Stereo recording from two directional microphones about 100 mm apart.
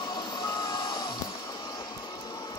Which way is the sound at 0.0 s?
45° left (ahead or behind).